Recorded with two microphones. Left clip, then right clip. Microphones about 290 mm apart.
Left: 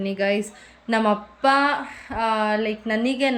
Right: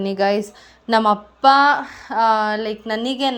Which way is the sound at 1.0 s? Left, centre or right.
Centre.